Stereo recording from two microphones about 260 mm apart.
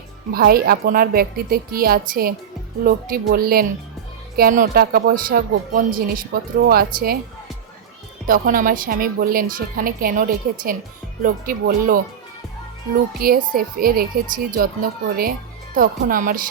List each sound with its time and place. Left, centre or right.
0.3 s speech: right
8.3 s speech: right
13.1 s speech: right